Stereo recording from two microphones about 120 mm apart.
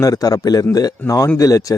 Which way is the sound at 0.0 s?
30° left (ahead or behind).